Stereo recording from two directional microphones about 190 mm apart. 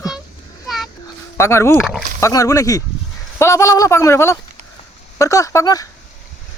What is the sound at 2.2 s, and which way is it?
Speech, 15° left (ahead or behind).